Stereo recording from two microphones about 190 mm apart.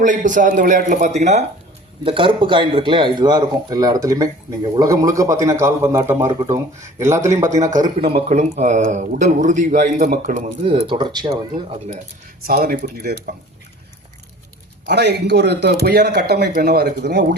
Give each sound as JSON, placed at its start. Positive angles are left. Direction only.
{"t": 0.0, "sound": "a man's voice", "side_deg": -40}
{"t": 7.8, "sound": "speech", "side_deg": -30}
{"t": 12.5, "sound": "speech", "side_deg": -50}
{"t": 14.8, "sound": "speech", "side_deg": -60}